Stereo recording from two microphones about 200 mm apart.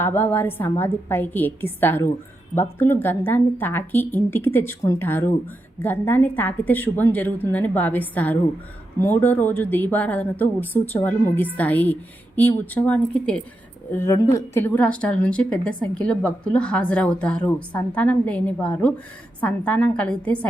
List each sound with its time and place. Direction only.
0.0 s a woman's voice: 10° left (ahead or behind)